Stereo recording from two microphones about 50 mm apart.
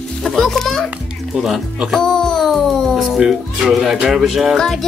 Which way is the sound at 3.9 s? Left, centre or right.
Centre.